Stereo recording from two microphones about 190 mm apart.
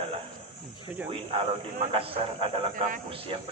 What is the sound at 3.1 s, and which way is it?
Speech, 30° right (ahead or behind).